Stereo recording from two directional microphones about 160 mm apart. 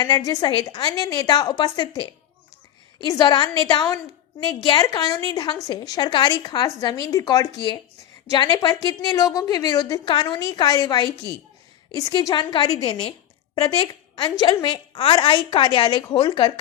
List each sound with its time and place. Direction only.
0.0 s a woman's voice: 25° left (ahead or behind)
8.7 s a woman's voice: 25° left (ahead or behind)